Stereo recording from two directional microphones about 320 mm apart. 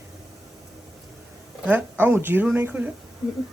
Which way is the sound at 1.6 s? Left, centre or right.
Centre.